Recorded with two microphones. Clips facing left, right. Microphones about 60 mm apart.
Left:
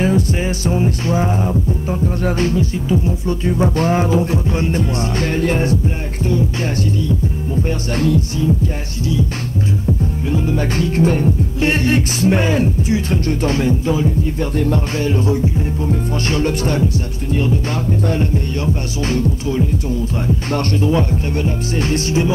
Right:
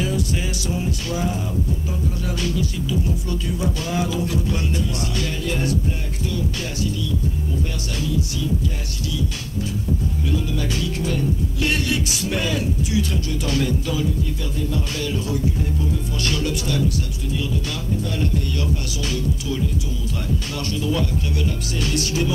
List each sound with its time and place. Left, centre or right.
0.0 s music: left
7.9 s music: left
10.3 s music: left
15.0 s music: left